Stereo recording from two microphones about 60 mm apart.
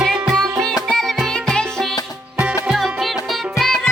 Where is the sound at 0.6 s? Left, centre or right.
Centre.